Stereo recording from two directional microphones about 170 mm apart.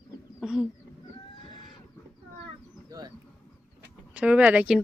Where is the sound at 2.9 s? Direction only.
20° right (ahead or behind).